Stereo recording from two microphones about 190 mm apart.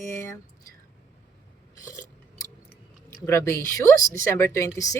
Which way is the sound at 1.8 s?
15° left (ahead or behind).